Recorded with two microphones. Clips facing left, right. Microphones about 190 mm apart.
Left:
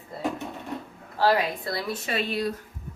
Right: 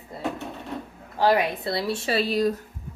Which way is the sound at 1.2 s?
20° right (ahead or behind).